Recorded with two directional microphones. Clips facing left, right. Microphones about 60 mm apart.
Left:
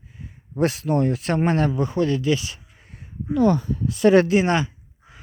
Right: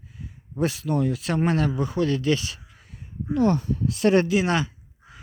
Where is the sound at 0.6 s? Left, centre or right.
Left.